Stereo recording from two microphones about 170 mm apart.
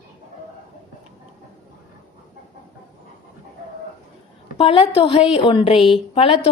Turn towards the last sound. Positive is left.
turn(degrees=30)  # may be behind; listen again after turning